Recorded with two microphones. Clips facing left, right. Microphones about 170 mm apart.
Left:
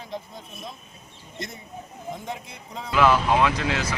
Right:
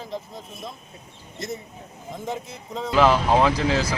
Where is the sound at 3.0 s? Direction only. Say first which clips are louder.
Right 1 dB; 30° right (ahead or behind).